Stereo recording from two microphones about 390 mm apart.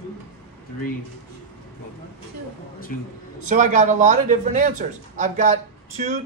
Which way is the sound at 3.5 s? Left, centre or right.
Centre.